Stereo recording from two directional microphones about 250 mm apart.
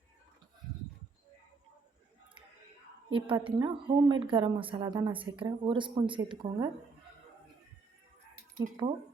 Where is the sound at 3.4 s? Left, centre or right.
Centre.